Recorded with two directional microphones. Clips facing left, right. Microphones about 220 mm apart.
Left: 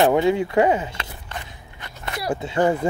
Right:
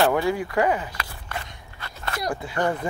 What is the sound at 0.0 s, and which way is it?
Speech, 20° left (ahead or behind).